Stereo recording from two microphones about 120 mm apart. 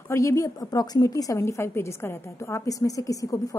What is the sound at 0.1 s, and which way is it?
A woman's voice, 25° left (ahead or behind).